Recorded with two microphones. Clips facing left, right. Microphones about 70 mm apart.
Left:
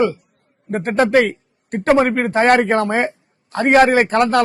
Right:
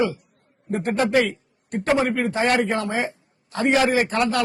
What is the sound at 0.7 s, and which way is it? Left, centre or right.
A man's voice, left.